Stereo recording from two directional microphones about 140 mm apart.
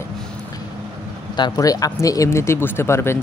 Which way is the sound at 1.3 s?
30° left (ahead or behind).